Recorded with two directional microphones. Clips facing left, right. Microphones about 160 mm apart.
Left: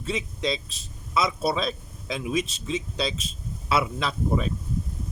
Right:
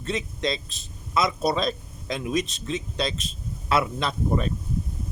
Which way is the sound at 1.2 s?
5° left (ahead or behind).